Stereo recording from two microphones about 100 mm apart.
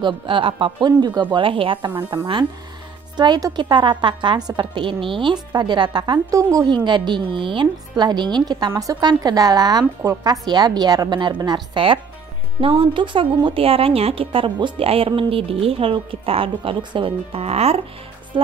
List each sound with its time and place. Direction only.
0.0 s a woman's voice: 60° right (ahead or behind)
3.2 s a woman's voice: 40° right (ahead or behind); by 17.8 s 90° right
18.3 s speech: 60° right (ahead or behind)